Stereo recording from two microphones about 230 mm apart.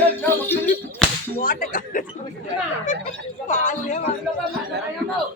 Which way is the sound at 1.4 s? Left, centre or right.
Left.